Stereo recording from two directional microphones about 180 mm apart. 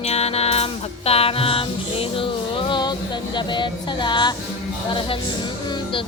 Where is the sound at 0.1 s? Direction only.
35° left (ahead or behind).